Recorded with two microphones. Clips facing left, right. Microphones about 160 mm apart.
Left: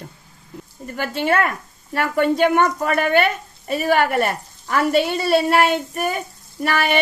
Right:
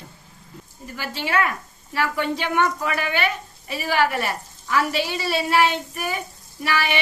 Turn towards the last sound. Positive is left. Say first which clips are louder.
# left 4 dB
turn(degrees=50)  # may be behind; listen again after turning